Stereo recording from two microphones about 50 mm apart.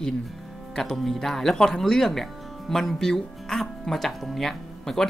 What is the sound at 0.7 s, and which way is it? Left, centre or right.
Speech, centre.